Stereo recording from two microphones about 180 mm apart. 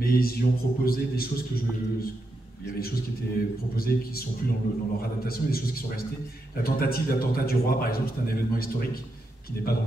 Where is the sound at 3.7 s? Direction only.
55° left (ahead or behind).